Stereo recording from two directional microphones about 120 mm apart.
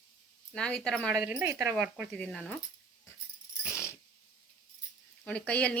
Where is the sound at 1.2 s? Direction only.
15° right (ahead or behind).